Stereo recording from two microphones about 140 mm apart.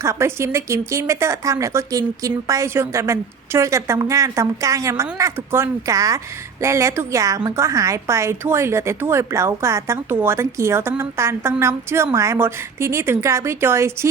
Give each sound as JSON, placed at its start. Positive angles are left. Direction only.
{"t": 0.0, "sound": "a woman's voice", "side_deg": -20}